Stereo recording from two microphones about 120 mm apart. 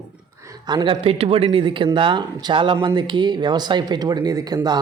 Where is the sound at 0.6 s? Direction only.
40° right (ahead or behind).